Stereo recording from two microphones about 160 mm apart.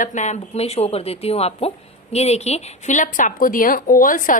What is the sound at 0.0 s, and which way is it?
A woman's voice, 50° left (ahead or behind).